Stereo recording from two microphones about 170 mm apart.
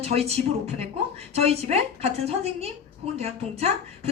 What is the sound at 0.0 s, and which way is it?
A woman's voice, 40° right (ahead or behind).